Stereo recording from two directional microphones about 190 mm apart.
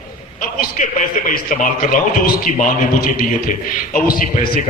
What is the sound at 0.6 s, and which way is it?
A man's voice, 45° left (ahead or behind).